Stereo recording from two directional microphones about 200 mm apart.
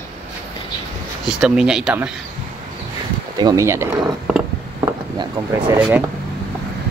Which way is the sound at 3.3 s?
20° right (ahead or behind).